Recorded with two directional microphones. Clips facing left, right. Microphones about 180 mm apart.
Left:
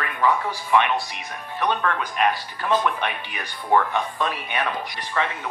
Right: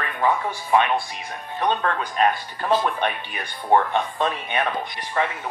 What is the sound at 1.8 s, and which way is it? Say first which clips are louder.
Speech: right 1 dB; 35° right (ahead or behind).